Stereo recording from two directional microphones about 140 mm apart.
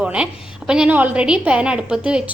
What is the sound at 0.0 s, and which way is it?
A woman's voice, 10° right (ahead or behind).